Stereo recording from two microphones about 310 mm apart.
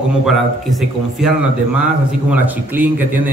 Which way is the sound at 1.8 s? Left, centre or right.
Centre.